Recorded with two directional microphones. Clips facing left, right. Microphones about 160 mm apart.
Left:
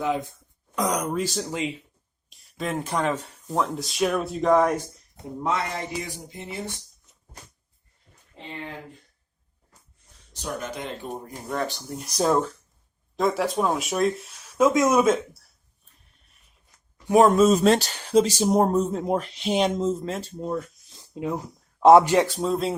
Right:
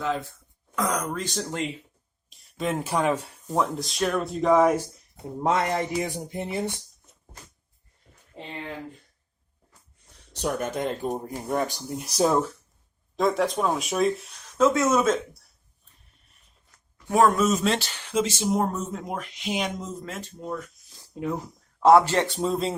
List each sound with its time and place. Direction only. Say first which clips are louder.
0.0 s speech: left 2 dB; 15° left (ahead or behind)
1.3 s speech: left 1 dB; centre (ahead or behind)
3.6 s speech: left 1 dB; centre (ahead or behind)
5.4 s speech: right 4 dB; 45° right (ahead or behind)
10.3 s speech: right 5 dB; 60° right (ahead or behind)
10.8 s speech: right 6 dB; 45° right (ahead or behind)
11.4 s speech: right 2 dB; 15° right (ahead or behind)
11.9 s speech: even; 5° right (ahead or behind)
14.6 s speech: left 2 dB; 15° left (ahead or behind)
17.1 s speech: left 4 dB; 20° left (ahead or behind)
21.0 s a sound: left 1 dB; 15° left (ahead or behind)
21.8 s speech: left 3 dB; 20° left (ahead or behind)
22.3 s speech: left 1 dB; centre (ahead or behind)